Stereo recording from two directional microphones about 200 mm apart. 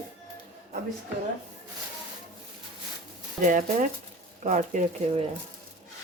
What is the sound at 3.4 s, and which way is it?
Speech, 40° right (ahead or behind).